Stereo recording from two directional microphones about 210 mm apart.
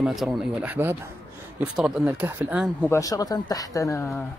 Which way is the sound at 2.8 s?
15° left (ahead or behind).